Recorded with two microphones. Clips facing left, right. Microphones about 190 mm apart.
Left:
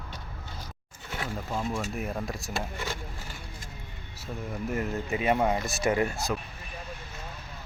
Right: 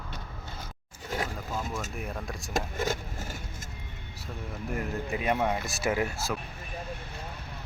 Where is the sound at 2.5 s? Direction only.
45° right (ahead or behind).